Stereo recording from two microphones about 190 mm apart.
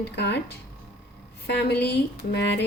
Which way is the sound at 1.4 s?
60° left (ahead or behind).